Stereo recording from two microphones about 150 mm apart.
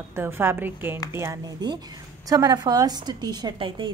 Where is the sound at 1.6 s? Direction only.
30° right (ahead or behind).